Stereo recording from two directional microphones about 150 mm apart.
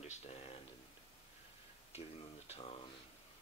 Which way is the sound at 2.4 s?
45° left (ahead or behind).